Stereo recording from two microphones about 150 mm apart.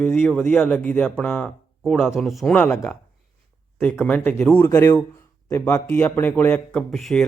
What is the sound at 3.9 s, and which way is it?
Speech, 10° left (ahead or behind).